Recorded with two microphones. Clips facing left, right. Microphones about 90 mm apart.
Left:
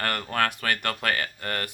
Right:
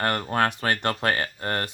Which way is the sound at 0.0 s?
25° right (ahead or behind).